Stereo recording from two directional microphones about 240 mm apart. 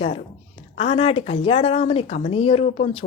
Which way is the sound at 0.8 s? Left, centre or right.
Left.